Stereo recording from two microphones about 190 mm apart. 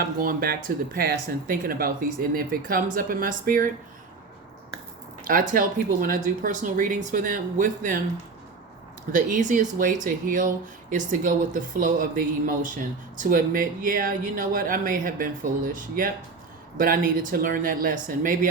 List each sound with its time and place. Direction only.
0.0 s speech: 50° right (ahead or behind)
5.2 s speech: 45° right (ahead or behind)
9.1 s speech: 40° right (ahead or behind)